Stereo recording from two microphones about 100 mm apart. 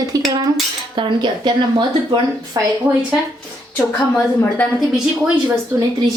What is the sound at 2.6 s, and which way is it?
Speech, 40° right (ahead or behind).